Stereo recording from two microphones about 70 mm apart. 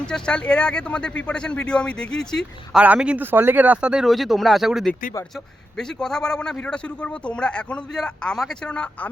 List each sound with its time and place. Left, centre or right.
0.1 s a man's voice: centre
2.8 s speech: centre
3.2 s speech: right; by 4.0 s centre
4.0 s speech: centre
5.7 s a man's voice: centre